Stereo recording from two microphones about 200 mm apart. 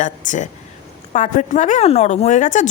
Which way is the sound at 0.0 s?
40° left (ahead or behind).